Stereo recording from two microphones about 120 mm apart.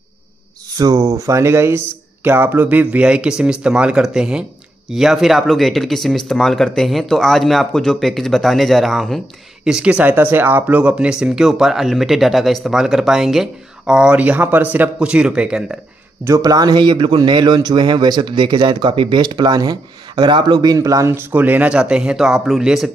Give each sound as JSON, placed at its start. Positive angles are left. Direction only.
{"t": 0.7, "sound": "speech", "side_deg": -30}
{"t": 16.3, "sound": "speech", "side_deg": -30}